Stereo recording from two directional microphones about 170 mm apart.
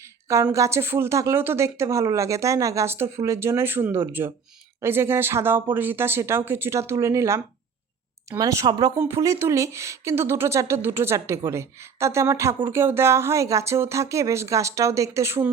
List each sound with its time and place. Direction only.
0.0 s a woman's voice: 15° right (ahead or behind)